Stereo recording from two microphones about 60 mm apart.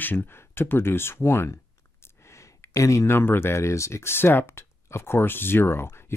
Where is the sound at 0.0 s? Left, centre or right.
Left.